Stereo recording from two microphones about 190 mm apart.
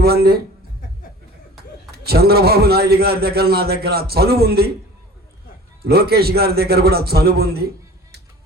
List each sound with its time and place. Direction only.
0.0 s a man's voice: 55° right (ahead or behind)
2.0 s a man's voice: 55° right (ahead or behind)
5.8 s a man's voice: 55° right (ahead or behind)